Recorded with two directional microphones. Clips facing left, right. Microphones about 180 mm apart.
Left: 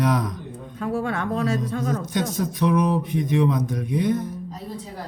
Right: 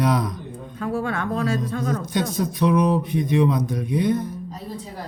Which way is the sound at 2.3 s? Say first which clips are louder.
Right 2 dB; 30° right (ahead or behind).